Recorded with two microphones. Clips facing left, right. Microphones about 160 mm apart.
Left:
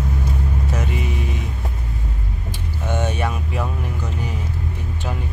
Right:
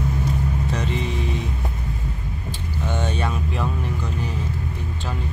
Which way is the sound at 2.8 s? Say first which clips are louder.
Left 2 dB; 15° left (ahead or behind).